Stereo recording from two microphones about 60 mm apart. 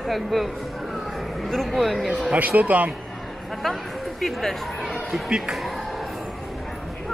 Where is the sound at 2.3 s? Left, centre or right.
Right.